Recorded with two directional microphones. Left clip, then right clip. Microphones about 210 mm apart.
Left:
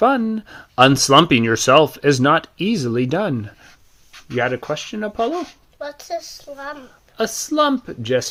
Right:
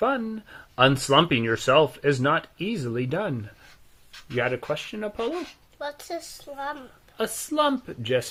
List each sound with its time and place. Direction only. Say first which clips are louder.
0.0 s speech: left 9 dB; 45° left (ahead or behind)
4.4 s speech: left 5 dB; 35° left (ahead or behind)
5.3 s speech: left 7 dB; centre (ahead or behind)
5.8 s a woman's voice: left 6 dB; 20° right (ahead or behind)
7.2 s speech: left 6 dB; 35° left (ahead or behind)